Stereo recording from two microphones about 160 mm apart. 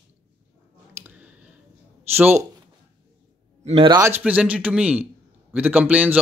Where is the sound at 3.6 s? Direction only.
40° right (ahead or behind).